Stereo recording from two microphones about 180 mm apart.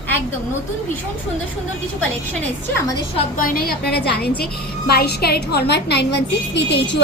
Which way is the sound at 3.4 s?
50° left (ahead or behind).